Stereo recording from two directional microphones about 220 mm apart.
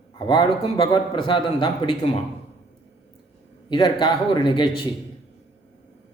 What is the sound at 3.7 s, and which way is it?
A man's voice, 20° left (ahead or behind).